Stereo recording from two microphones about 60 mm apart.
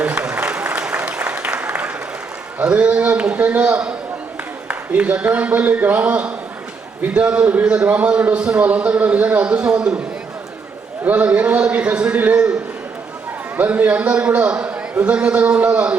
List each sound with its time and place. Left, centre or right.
0.0 s applause: right
2.6 s a man's voice: centre
11.0 s a man's voice: right
13.6 s a man's voice: right